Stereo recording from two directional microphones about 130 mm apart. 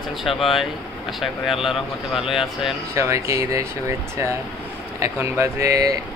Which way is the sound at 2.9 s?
25° right (ahead or behind).